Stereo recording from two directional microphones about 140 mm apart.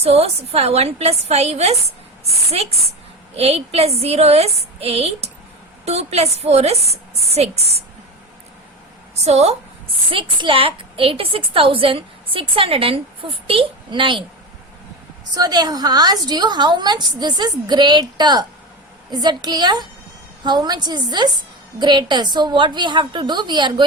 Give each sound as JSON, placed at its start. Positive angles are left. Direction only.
{"t": 0.0, "sound": "a woman's voice", "side_deg": -45}
{"t": 9.2, "sound": "a woman's voice", "side_deg": -50}
{"t": 10.1, "sound": "a woman's voice", "side_deg": -40}
{"t": 15.4, "sound": "a woman's voice", "side_deg": -30}